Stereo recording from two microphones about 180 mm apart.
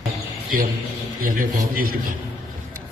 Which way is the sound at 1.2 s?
50° right (ahead or behind).